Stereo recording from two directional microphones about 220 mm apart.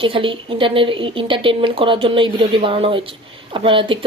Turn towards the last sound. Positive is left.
turn(degrees=-25)  # may be behind; listen again after turning